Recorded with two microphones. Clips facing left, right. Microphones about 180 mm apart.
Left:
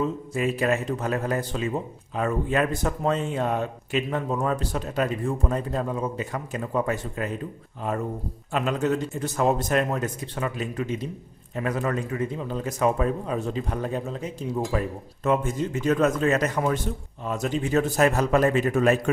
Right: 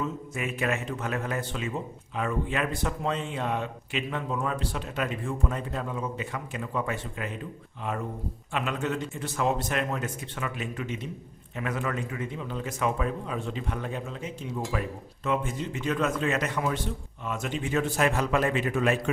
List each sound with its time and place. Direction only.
0.0 s a man's voice: 35° left (ahead or behind)